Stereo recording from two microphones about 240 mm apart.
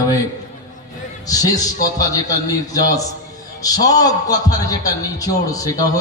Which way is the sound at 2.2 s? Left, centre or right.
Centre.